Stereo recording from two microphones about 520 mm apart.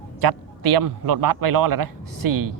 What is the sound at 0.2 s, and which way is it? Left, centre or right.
A man's voice, right.